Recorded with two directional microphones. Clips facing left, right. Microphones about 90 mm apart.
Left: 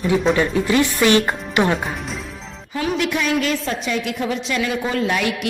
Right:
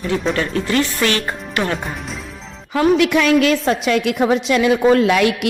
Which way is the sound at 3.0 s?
65° right (ahead or behind).